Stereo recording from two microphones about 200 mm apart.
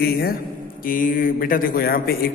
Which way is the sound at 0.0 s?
50° left (ahead or behind).